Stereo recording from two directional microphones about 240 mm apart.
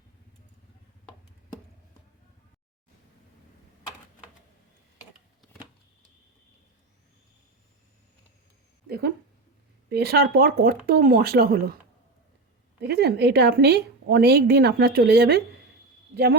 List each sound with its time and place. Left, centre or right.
8.9 s a woman's voice: right
12.8 s a woman's voice: right